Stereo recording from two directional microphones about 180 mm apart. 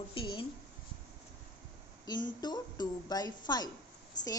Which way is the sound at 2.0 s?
25° left (ahead or behind).